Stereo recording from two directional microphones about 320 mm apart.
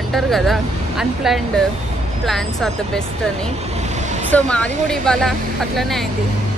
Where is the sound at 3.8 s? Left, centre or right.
Right.